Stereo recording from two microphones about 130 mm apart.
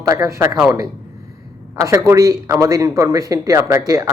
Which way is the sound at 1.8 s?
25° right (ahead or behind).